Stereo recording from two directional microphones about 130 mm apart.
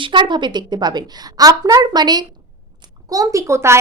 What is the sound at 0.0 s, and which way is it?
A woman's voice, 40° right (ahead or behind).